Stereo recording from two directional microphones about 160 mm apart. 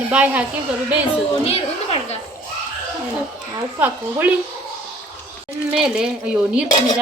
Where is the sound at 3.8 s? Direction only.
10° right (ahead or behind).